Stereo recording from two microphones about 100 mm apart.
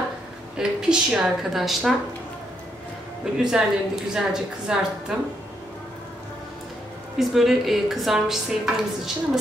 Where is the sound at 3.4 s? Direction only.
5° right (ahead or behind).